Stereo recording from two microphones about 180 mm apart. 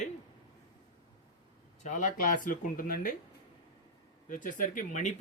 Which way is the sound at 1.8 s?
45° left (ahead or behind).